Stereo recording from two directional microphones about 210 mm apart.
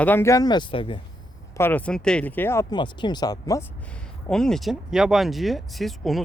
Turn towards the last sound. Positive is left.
turn(degrees=0)  # may be behind; listen again after turning